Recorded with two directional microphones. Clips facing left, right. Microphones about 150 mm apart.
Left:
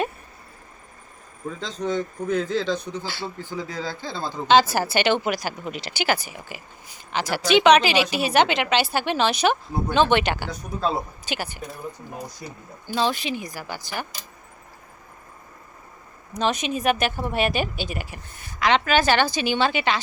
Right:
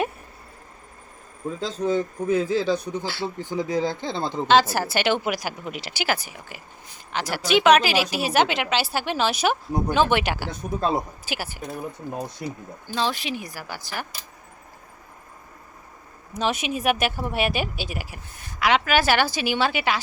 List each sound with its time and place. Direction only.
1.8 s speech: 5° right (ahead or behind)
4.4 s a woman's voice: centre (ahead or behind)
10.5 s speech: 20° right (ahead or behind)
11.3 s speech: 5° right (ahead or behind)
12.9 s a woman's voice: centre (ahead or behind)
16.3 s speech: 5° right (ahead or behind)